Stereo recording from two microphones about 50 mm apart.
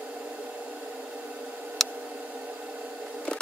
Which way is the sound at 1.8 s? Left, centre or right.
Centre.